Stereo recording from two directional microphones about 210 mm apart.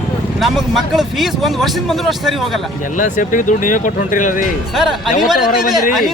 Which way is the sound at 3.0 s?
40° left (ahead or behind).